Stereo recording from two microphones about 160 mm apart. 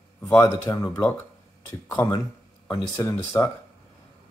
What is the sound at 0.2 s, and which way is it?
Speech, 15° left (ahead or behind).